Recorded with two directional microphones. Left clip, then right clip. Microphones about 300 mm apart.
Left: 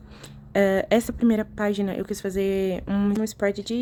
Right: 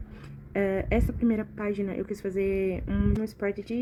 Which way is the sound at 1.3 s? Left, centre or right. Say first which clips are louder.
Left 6 dB; left.